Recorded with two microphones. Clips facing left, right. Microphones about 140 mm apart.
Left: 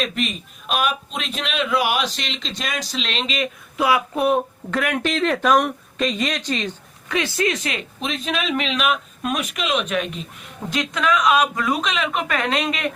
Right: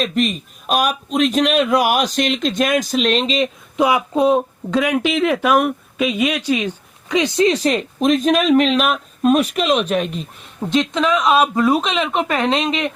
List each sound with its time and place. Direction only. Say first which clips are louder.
0.3 s a man's voice: right 5 dB; 40° right (ahead or behind)
3.2 s speech: right 6 dB; 25° right (ahead or behind)
7.9 s speech: right 11 dB; 45° right (ahead or behind)
10.7 s speech: right 4 dB; 25° right (ahead or behind)